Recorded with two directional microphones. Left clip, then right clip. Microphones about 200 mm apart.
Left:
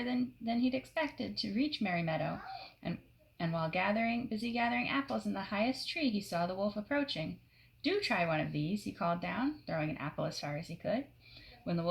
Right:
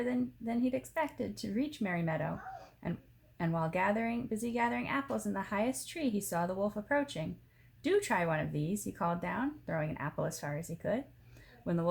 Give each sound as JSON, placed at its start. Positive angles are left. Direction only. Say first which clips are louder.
{"t": 0.0, "sound": "speech", "louder": "right 2 dB", "side_deg": -30}
{"t": 3.3, "sound": "speech", "louder": "right 1 dB", "side_deg": -35}